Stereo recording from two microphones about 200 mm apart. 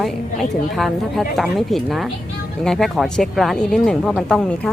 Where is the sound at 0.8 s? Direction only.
Centre (ahead or behind).